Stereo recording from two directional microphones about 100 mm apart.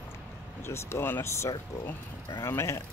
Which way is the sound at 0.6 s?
25° left (ahead or behind).